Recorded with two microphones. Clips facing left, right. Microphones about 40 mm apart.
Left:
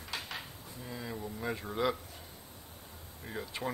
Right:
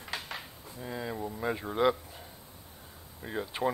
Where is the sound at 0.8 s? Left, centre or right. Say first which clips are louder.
Right 5 dB; right.